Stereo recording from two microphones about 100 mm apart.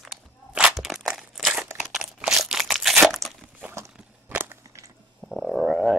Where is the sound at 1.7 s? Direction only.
5° right (ahead or behind).